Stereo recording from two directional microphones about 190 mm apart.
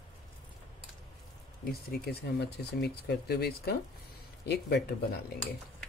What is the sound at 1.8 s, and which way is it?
Speech, 60° left (ahead or behind).